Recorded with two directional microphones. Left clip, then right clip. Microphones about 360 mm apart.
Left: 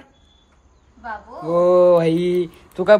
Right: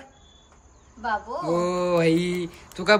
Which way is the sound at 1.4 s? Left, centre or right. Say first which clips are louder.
Left 13 dB; centre.